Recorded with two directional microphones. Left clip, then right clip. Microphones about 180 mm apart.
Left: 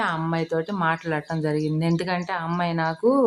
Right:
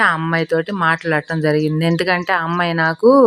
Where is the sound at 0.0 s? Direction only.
25° right (ahead or behind).